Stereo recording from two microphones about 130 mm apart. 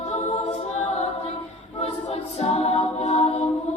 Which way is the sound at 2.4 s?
55° left (ahead or behind).